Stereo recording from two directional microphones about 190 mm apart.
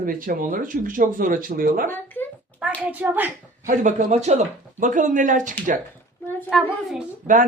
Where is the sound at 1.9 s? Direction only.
10° left (ahead or behind).